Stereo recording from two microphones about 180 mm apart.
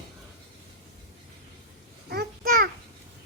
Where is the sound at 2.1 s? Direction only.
60° right (ahead or behind).